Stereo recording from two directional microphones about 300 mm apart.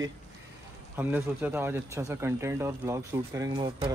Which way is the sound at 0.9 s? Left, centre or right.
Centre.